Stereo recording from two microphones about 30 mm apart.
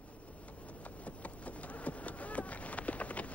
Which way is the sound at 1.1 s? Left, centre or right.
Left.